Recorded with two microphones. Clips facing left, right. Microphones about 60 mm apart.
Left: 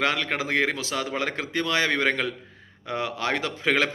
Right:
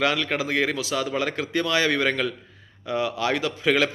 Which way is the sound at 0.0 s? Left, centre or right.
Left.